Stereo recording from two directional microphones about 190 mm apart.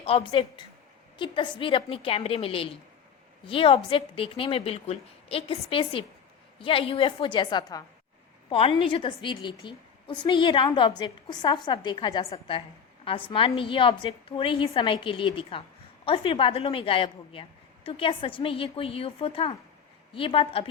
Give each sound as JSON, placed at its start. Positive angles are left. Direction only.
{"t": 0.0, "sound": "a woman's voice", "side_deg": 30}